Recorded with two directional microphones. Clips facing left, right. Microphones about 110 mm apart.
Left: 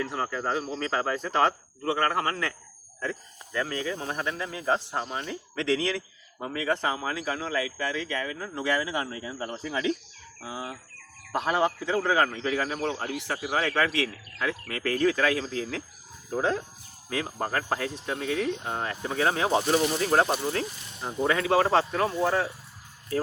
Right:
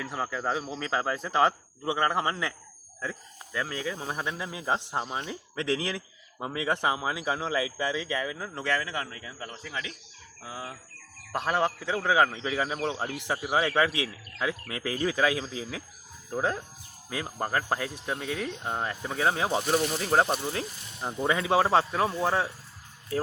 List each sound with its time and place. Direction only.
0.0 s speech: 5° right (ahead or behind)
8.6 s speech: 10° left (ahead or behind)
9.0 s speech: 25° left (ahead or behind)
11.3 s speech: centre (ahead or behind)
17.1 s speech: 5° right (ahead or behind)